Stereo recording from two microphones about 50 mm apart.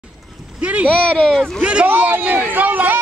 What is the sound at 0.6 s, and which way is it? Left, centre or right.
Speech, right.